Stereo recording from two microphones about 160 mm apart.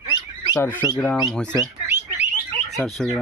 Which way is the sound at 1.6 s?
15° right (ahead or behind).